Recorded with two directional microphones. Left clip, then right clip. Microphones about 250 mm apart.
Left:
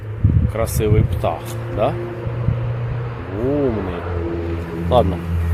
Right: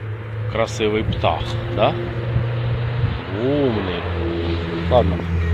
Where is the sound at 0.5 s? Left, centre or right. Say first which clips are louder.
Right 1 dB; centre.